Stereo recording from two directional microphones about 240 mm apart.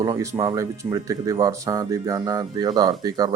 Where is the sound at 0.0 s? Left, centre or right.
Centre.